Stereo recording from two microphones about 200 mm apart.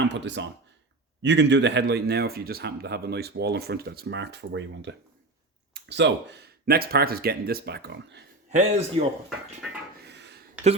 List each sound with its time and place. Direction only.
0.1 s speech: 60° right (ahead or behind)
8.4 s a man's voice: 35° right (ahead or behind)
9.6 s wood: 5° right (ahead or behind)
10.0 s a sound: 60° right (ahead or behind)